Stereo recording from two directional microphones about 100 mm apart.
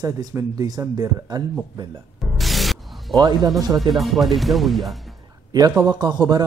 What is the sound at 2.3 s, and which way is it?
Music, centre (ahead or behind).